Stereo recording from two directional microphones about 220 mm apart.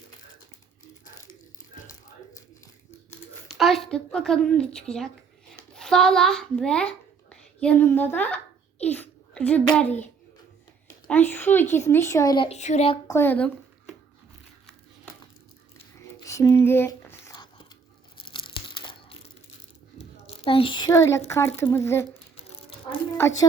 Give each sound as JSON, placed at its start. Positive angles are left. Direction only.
{"t": 3.5, "sound": "a woman's voice", "side_deg": 0}
{"t": 8.8, "sound": "a sound", "side_deg": 5}
{"t": 9.7, "sound": "speech", "side_deg": 5}
{"t": 11.1, "sound": "speech", "side_deg": 10}
{"t": 13.1, "sound": "speech", "side_deg": 10}
{"t": 16.0, "sound": "a sound", "side_deg": 15}
{"t": 18.2, "sound": "tearing", "side_deg": 20}
{"t": 20.2, "sound": "speech", "side_deg": 25}
{"t": 23.2, "sound": "speech", "side_deg": 15}